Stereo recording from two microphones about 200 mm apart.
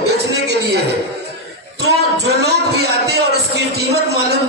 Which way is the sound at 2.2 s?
55° right (ahead or behind).